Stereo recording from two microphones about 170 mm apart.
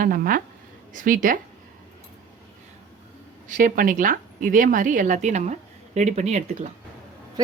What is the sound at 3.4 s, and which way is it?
Speech, 50° right (ahead or behind).